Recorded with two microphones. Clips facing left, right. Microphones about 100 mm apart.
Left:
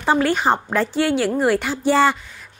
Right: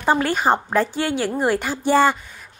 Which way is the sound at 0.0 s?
10° right (ahead or behind).